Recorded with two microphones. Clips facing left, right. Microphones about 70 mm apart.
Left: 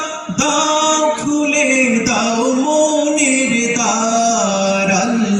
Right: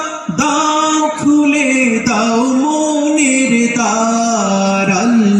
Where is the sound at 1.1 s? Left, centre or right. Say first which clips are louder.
Right 6 dB; right.